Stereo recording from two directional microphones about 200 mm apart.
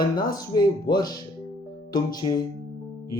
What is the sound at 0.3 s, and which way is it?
Speech, 20° left (ahead or behind).